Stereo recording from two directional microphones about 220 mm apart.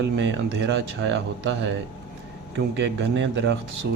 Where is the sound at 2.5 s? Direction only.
55° right (ahead or behind).